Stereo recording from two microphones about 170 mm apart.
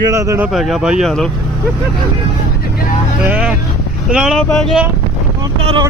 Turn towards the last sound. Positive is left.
turn(degrees=-35)  # may be behind; listen again after turning